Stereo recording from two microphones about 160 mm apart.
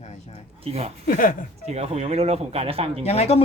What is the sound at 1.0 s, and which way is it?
Speech, 60° left (ahead or behind).